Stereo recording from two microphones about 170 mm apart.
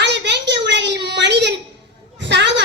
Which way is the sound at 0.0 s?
90° right.